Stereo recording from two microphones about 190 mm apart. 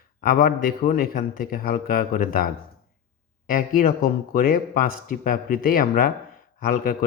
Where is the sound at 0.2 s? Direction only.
50° left (ahead or behind).